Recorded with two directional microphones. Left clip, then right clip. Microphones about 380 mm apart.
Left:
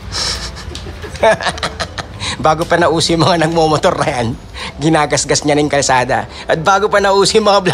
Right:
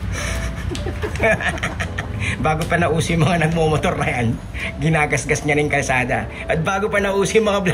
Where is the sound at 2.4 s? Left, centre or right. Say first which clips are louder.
Left 8 dB; centre.